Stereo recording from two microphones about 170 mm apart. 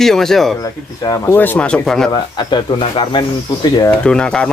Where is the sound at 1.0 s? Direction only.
20° left (ahead or behind).